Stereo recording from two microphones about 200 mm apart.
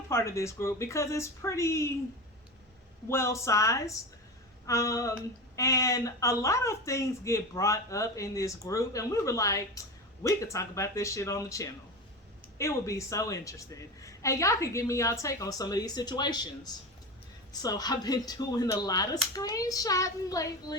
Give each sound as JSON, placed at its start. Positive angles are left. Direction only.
{"t": 0.1, "sound": "speech", "side_deg": 15}
{"t": 3.1, "sound": "speech", "side_deg": 15}
{"t": 17.5, "sound": "speech", "side_deg": 20}